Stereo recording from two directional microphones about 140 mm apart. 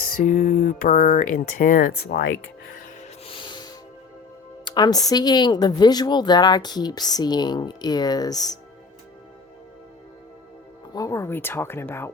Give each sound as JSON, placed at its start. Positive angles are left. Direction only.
{"t": 0.2, "sound": "speech", "side_deg": 65}
{"t": 2.1, "sound": "speech", "side_deg": 90}
{"t": 3.0, "sound": "music", "side_deg": 40}
{"t": 4.6, "sound": "speech", "side_deg": 30}
{"t": 10.9, "sound": "speech", "side_deg": 20}